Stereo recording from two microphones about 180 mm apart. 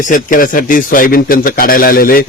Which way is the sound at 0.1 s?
50° left (ahead or behind).